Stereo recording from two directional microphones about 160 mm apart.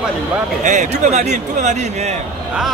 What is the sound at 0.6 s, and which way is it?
Speech, 50° right (ahead or behind).